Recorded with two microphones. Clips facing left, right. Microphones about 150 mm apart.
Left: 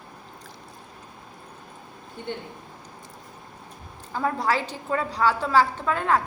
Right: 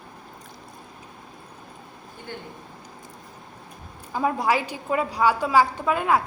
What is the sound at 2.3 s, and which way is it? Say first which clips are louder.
Speech: left 4 dB; 25° left (ahead or behind).